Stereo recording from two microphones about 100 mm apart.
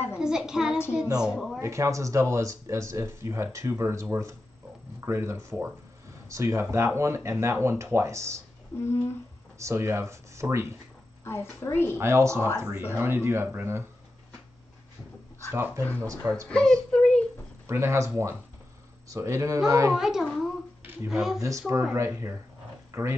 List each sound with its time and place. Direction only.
0.2 s a child's voice: 5° right (ahead or behind)
1.6 s speech: 30° right (ahead or behind)
8.7 s a woman's voice: 25° left (ahead or behind)
9.6 s speech: 30° right (ahead or behind)
11.2 s a woman's voice: 25° left (ahead or behind)
12.0 s speech: 25° right (ahead or behind)
15.5 s speech: 25° right (ahead or behind)
16.4 s speech: 10° left (ahead or behind)
17.6 s speech: 25° right (ahead or behind)
19.9 s a child's voice: 5° right (ahead or behind)
21.4 s speech: 30° right (ahead or behind)